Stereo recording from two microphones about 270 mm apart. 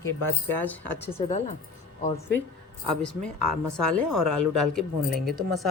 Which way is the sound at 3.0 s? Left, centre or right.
Centre.